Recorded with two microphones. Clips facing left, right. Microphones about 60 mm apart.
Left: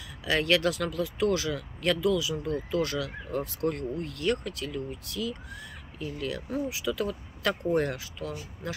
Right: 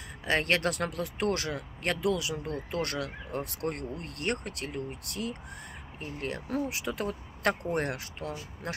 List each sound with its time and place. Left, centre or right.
0.2 s speech: right
1.5 s speech: right
3.9 s speech: right